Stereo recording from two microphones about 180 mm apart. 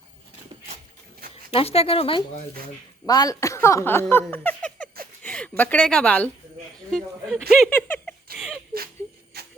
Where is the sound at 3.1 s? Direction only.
20° left (ahead or behind); by 7.4 s 5° left (ahead or behind).